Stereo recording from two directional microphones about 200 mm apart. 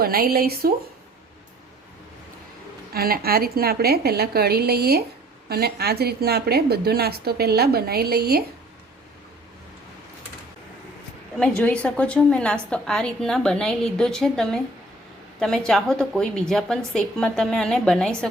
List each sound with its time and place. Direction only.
0.0 s a woman's voice: 50° right (ahead or behind)
2.9 s a woman's voice: 50° right (ahead or behind)
11.3 s a woman's voice: 5° left (ahead or behind)